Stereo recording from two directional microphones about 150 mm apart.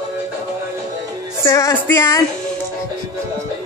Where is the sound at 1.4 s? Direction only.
20° left (ahead or behind).